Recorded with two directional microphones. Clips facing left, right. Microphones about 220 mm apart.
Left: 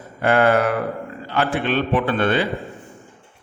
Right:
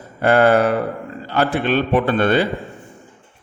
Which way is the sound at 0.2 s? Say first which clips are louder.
Right 3 dB; 35° right (ahead or behind).